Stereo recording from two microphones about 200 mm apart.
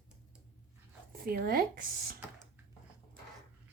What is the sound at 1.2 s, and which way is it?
Speech, 45° right (ahead or behind).